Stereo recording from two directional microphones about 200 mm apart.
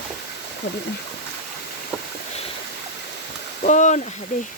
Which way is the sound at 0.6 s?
55° left (ahead or behind).